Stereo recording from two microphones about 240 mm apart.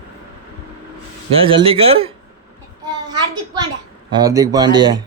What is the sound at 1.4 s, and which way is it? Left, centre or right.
Speech, right.